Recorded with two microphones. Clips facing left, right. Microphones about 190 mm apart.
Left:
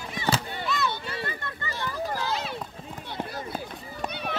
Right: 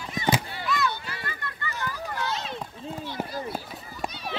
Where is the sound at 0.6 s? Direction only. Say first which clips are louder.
Right 1 dB; 25° left (ahead or behind).